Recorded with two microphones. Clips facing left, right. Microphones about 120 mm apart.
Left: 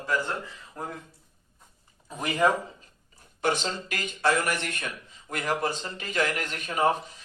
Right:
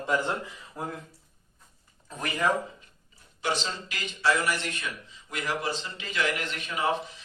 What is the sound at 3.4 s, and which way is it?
A man's voice, 50° left (ahead or behind).